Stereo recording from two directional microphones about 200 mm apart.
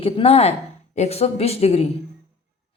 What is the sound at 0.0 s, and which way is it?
A woman's voice, 30° left (ahead or behind).